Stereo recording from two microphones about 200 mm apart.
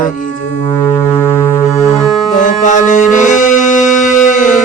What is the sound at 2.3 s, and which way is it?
Music, 40° left (ahead or behind).